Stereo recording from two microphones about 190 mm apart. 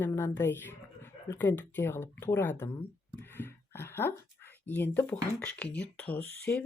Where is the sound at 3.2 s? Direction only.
10° left (ahead or behind).